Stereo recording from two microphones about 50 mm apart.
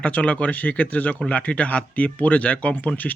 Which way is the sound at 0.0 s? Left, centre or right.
Left.